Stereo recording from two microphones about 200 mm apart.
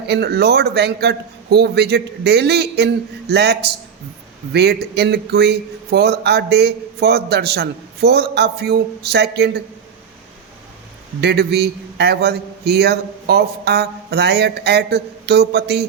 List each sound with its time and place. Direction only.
0.1 s speech: 55° right (ahead or behind)
11.2 s speech: 55° right (ahead or behind)